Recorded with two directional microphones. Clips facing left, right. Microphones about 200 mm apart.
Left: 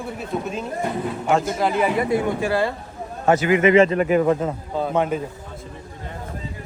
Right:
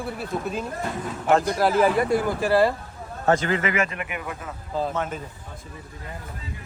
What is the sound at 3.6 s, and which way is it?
Speech, 30° left (ahead or behind).